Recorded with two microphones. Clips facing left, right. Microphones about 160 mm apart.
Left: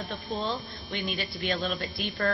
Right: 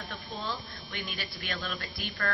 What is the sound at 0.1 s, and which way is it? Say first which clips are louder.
A woman's voice: left 6 dB; 20° left (ahead or behind).